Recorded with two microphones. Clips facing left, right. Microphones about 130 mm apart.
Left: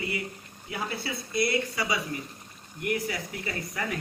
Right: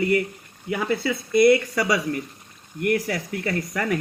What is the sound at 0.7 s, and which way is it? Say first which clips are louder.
Speech: right 9 dB; 85° right.